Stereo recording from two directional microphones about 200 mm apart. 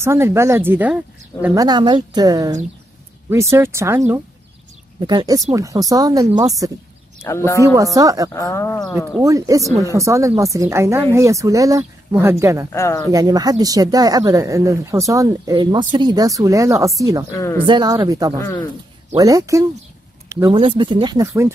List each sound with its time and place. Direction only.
0.0 s speech: 15° right (ahead or behind)
5.0 s speech: 20° right (ahead or behind)
7.2 s speech: 15° left (ahead or behind)
7.6 s speech: 15° right (ahead or behind)
8.3 s speech: 15° left (ahead or behind)
9.2 s speech: 15° right (ahead or behind)
12.7 s speech: 15° left (ahead or behind)
13.1 s speech: 20° right (ahead or behind)
17.3 s speech: 15° left (ahead or behind)
17.6 s speech: 20° right (ahead or behind)